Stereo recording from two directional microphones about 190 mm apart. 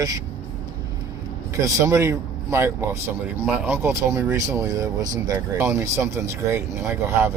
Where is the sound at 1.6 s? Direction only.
15° right (ahead or behind).